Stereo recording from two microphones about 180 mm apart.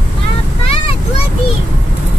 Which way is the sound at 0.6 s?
35° left (ahead or behind).